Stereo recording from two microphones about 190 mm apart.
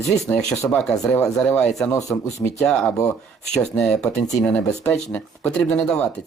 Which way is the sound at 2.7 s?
5° left (ahead or behind).